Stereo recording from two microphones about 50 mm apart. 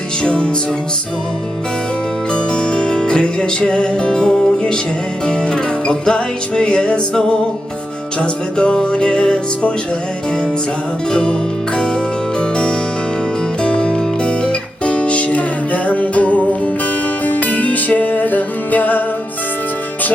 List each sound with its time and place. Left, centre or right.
0.2 s music: centre
2.3 s music: centre
11.1 s music: centre
12.4 s music: centre; by 19.0 s left